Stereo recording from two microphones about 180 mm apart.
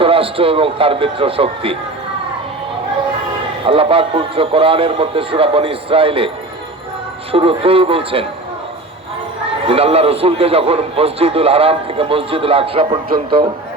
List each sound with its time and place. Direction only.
0.0 s a man's voice: 30° right (ahead or behind)
3.7 s a man's voice: 30° right (ahead or behind)
9.6 s a man's voice: 35° right (ahead or behind)